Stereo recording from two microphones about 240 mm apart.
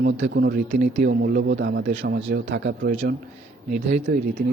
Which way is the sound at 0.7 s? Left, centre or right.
Right.